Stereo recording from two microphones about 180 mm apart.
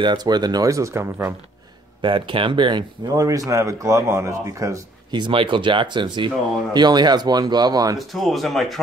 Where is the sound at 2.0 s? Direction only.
30° right (ahead or behind).